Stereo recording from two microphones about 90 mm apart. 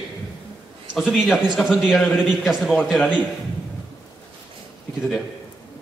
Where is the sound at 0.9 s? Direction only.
5° right (ahead or behind).